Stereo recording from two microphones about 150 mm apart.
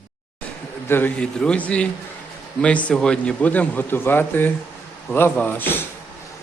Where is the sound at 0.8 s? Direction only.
15° left (ahead or behind).